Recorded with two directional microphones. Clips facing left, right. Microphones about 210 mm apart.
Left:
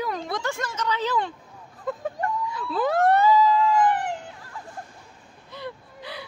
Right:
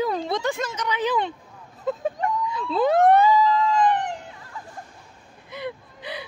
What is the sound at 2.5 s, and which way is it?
Emergency vehicle, 25° right (ahead or behind).